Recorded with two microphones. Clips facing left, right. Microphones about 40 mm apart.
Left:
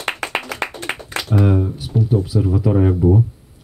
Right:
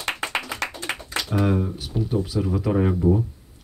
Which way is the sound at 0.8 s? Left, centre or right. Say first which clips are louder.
Left 4 dB; left.